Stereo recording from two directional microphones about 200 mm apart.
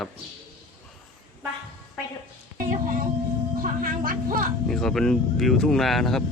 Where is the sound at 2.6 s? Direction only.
45° right (ahead or behind).